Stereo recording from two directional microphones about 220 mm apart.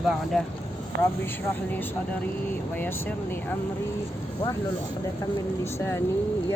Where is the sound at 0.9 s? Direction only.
50° right (ahead or behind).